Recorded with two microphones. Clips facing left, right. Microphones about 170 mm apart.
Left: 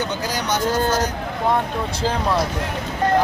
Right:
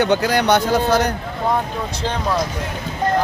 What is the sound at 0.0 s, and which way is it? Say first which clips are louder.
Speech: right 8 dB; 65° right (ahead or behind).